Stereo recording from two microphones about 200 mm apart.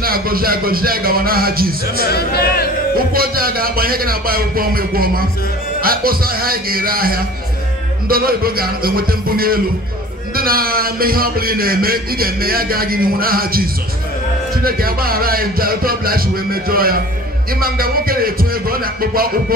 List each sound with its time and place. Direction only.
0.0 s a man's voice: 45° right (ahead or behind)
2.0 s a man's voice: 50° left (ahead or behind)
3.0 s a man's voice: 45° right (ahead or behind)